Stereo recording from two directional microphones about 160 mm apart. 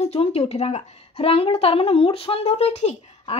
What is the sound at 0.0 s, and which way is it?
A woman's voice, 40° left (ahead or behind).